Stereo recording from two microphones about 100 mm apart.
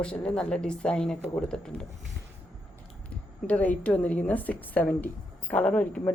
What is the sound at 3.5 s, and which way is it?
A woman's voice, 15° left (ahead or behind).